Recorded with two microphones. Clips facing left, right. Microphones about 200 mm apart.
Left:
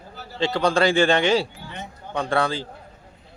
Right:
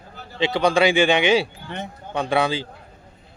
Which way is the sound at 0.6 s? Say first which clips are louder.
Right 1 dB; 15° right (ahead or behind).